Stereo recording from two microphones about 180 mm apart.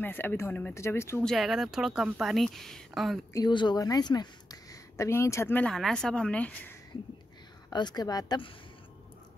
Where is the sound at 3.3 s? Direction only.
25° left (ahead or behind); by 6.7 s 5° left (ahead or behind).